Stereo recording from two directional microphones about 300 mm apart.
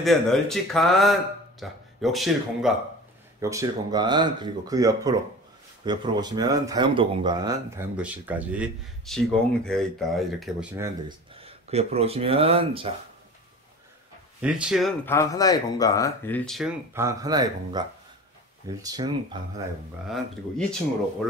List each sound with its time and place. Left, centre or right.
0.0 s speech: centre
11.1 s speech: centre
14.4 s speech: centre